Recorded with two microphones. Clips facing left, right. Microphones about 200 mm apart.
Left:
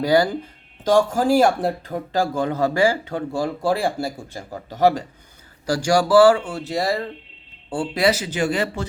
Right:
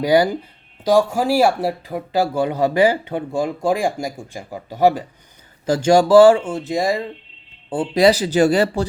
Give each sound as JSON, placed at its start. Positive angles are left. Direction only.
{"t": 0.0, "sound": "speech", "side_deg": -15}
{"t": 5.6, "sound": "speech", "side_deg": -25}